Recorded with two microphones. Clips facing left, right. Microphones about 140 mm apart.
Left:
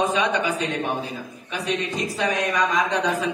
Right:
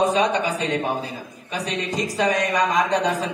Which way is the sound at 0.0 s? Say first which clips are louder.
Right 2 dB; 35° right (ahead or behind).